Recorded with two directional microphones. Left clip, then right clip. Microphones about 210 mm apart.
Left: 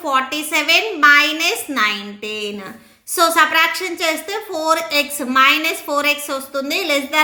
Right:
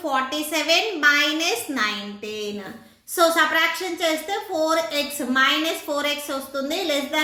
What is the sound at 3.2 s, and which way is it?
A woman's voice, 50° left (ahead or behind).